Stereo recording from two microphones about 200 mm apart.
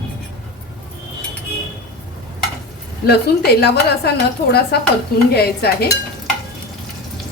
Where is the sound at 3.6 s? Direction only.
55° left (ahead or behind).